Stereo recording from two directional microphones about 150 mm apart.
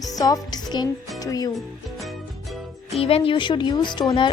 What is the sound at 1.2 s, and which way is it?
Speech, 25° left (ahead or behind).